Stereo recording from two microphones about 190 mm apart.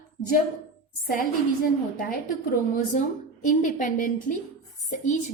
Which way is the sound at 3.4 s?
45° left (ahead or behind).